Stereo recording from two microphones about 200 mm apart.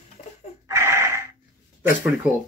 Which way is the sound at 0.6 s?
15° right (ahead or behind).